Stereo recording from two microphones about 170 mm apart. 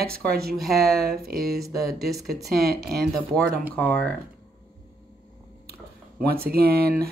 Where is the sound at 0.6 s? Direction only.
Centre (ahead or behind).